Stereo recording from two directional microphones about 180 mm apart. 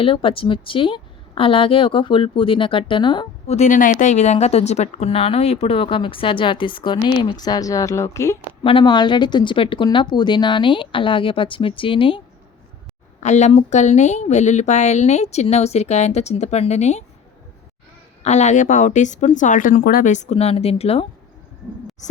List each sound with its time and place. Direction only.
0.0 s a woman's voice: 30° left (ahead or behind)
8.6 s a woman's voice: 25° left (ahead or behind)
13.1 s speech: 40° left (ahead or behind)
18.2 s speech: 40° left (ahead or behind)